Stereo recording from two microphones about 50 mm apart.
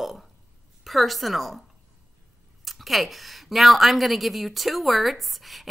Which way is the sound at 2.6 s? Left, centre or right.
Centre.